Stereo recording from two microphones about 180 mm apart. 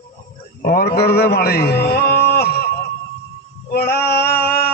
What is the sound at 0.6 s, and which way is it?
A man's voice, 60° left (ahead or behind).